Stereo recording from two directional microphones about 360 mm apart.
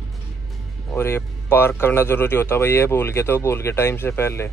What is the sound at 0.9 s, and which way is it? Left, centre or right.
Speech, centre.